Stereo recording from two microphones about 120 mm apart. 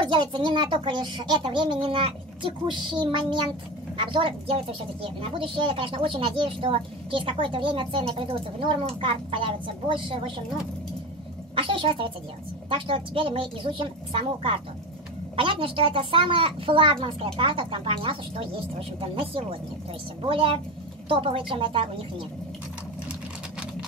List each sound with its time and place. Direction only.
0.0 s a woman's voice: 40° right (ahead or behind)
11.5 s a sound: 45° right (ahead or behind)
12.7 s a woman's voice: 45° right (ahead or behind)
15.4 s a woman's voice: 50° right (ahead or behind)